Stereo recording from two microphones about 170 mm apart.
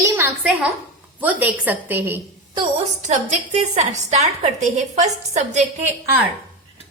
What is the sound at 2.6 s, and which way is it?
A woman's voice, 40° right (ahead or behind).